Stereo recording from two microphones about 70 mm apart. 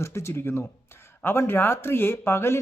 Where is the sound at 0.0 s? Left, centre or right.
Left.